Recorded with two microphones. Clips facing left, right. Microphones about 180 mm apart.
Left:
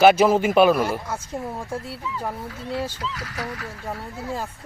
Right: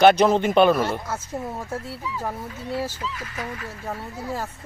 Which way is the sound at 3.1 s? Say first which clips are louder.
Left 1 dB; 85° left.